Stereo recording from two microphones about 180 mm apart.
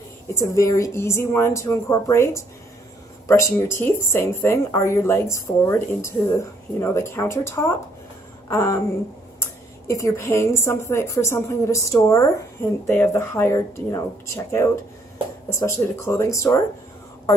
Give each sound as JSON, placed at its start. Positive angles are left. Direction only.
{"t": 0.5, "sound": "speech", "side_deg": 15}